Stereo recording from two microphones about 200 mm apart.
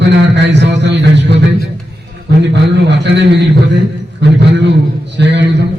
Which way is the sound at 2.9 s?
60° right (ahead or behind).